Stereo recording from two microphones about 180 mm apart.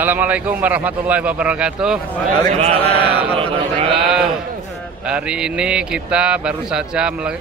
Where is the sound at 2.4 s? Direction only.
35° right (ahead or behind).